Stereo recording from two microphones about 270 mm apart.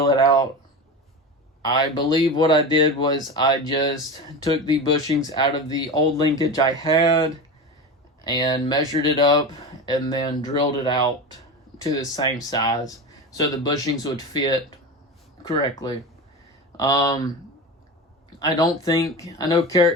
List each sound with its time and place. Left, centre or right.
0.0 s a sound: centre
1.6 s speech: centre
16.7 s speech: centre
18.3 s speech: centre